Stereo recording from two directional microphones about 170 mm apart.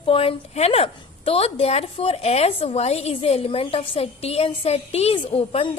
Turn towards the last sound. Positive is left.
turn(degrees=35)  # may be behind; listen again after turning